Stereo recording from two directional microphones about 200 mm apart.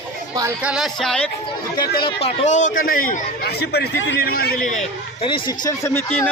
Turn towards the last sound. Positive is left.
turn(degrees=15)  # may be behind; listen again after turning